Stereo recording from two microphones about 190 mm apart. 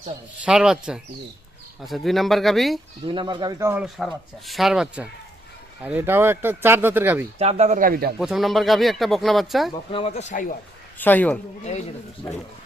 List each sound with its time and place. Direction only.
0.4 s speech: 5° right (ahead or behind)
3.1 s speech: 25° right (ahead or behind)
3.8 s speech: centre (ahead or behind)
7.3 s a man's voice: 35° right (ahead or behind); by 8.1 s 50° right (ahead or behind)
8.2 s speech: centre (ahead or behind)
9.9 s speech: 35° left (ahead or behind)
11.0 s speech: 10° left (ahead or behind)